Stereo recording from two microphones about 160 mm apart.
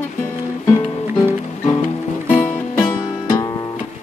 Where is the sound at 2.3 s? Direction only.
10° left (ahead or behind).